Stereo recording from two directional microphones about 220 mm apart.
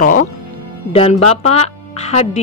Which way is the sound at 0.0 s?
40° left (ahead or behind).